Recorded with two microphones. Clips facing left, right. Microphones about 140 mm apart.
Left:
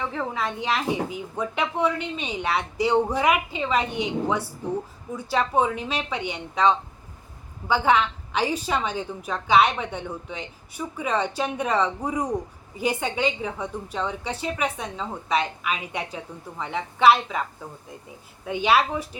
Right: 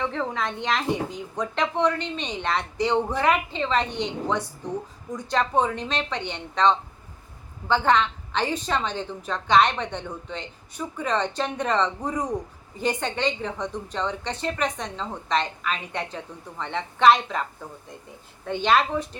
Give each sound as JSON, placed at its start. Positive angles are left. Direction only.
{"t": 0.0, "sound": "a woman's voice", "side_deg": 5}
{"t": 18.4, "sound": "a woman's voice", "side_deg": 5}